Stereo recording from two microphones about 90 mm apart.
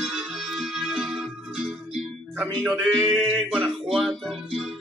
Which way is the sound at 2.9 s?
5° left (ahead or behind).